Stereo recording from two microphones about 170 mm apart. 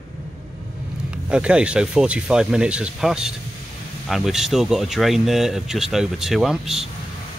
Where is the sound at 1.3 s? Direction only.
5° right (ahead or behind).